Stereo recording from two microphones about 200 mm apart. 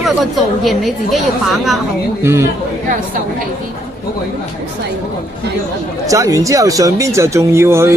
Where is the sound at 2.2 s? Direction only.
15° right (ahead or behind).